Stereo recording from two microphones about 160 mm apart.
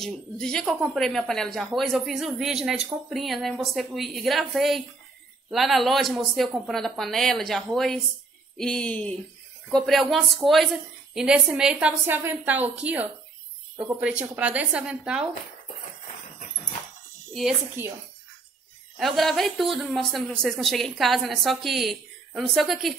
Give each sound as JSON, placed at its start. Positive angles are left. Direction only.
{"t": 0.0, "sound": "a woman's voice", "side_deg": 5}
{"t": 17.3, "sound": "speech", "side_deg": 0}
{"t": 17.8, "sound": "a woman's voice", "side_deg": -15}
{"t": 18.9, "sound": "speech", "side_deg": 0}